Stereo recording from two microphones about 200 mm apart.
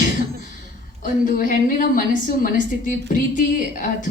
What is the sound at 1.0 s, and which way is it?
A woman's voice, 45° left (ahead or behind).